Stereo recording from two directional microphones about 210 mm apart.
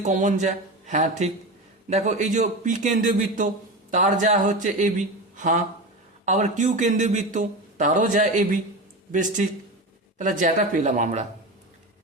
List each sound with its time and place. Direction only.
0.0 s speech: 35° right (ahead or behind)